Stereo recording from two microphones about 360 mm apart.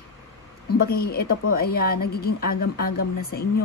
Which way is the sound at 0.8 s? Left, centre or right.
Left.